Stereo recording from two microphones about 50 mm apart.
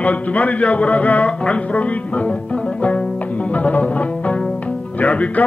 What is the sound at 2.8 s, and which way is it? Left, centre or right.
Music, left.